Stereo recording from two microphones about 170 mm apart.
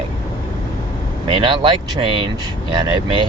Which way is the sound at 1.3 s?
30° right (ahead or behind).